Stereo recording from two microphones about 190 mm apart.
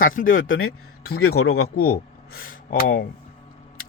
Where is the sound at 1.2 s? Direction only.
90° left.